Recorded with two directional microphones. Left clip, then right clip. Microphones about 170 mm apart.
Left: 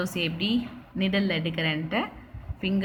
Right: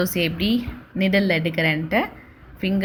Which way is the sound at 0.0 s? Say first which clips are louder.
Right 6 dB; 35° right (ahead or behind).